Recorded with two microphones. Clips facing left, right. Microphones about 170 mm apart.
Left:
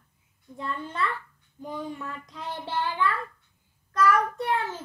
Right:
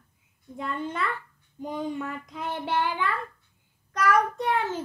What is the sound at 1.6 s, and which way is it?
Speech, 20° right (ahead or behind).